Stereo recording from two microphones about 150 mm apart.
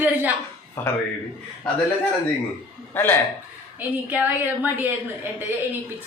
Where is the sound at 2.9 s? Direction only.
15° left (ahead or behind).